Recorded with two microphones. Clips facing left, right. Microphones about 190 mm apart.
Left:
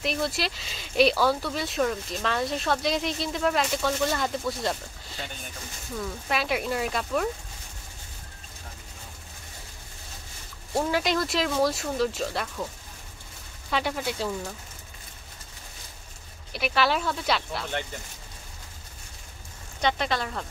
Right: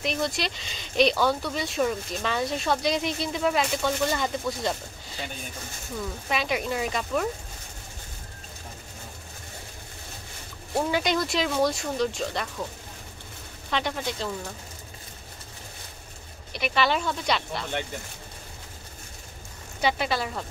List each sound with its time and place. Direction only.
0.0 s speech: centre (ahead or behind)
10.9 s speech: centre (ahead or behind)
13.7 s speech: 5° left (ahead or behind)
16.5 s speech: centre (ahead or behind)
19.8 s speech: 5° right (ahead or behind)